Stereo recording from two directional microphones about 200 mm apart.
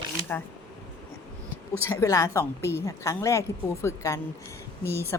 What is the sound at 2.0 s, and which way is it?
A woman's voice, 15° left (ahead or behind).